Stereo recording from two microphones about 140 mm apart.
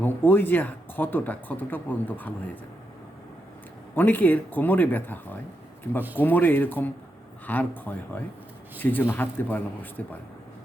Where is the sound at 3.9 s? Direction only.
15° left (ahead or behind).